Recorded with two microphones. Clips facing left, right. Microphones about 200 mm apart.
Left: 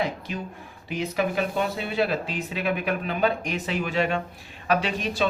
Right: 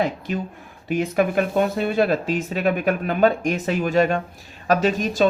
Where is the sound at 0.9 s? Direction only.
50° right (ahead or behind).